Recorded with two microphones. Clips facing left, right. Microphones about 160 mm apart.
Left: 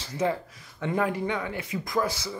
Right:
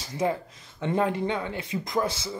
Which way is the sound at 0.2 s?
20° right (ahead or behind).